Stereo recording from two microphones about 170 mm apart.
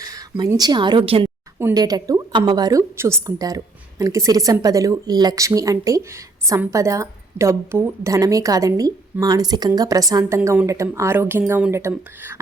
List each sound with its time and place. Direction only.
0.0 s a woman's voice: 20° right (ahead or behind)
1.5 s a woman's voice: 20° right (ahead or behind)